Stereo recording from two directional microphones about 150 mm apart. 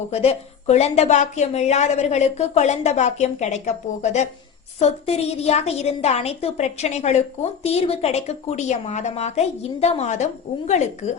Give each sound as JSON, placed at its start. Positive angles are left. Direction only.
{"t": 0.1, "sound": "a woman's voice", "side_deg": 45}